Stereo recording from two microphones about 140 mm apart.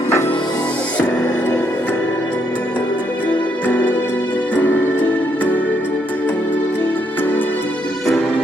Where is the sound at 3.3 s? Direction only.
10° left (ahead or behind).